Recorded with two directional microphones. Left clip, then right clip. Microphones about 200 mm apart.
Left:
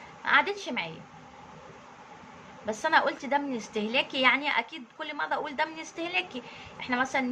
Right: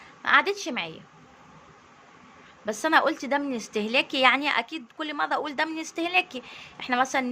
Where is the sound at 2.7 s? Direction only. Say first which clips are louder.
Right 3 dB; 60° right (ahead or behind).